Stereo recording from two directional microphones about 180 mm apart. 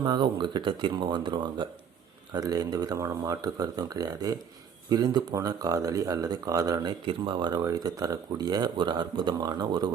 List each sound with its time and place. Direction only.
0.0 s speech: 25° right (ahead or behind)